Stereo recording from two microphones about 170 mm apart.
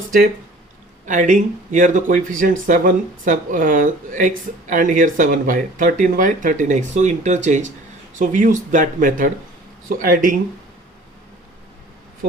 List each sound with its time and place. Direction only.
1.0 s speech: 50° right (ahead or behind)